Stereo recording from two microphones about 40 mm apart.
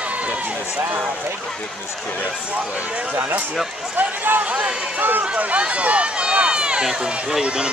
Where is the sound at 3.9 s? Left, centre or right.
Right.